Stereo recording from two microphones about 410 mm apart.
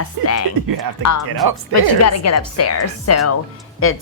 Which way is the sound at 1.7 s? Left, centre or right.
Left.